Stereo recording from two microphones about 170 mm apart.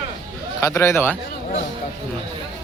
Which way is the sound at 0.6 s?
15° left (ahead or behind).